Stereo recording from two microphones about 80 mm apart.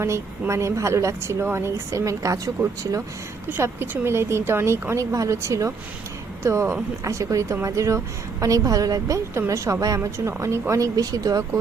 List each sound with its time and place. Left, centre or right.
0.0 s a woman's voice: right
3.6 s a woman's voice: right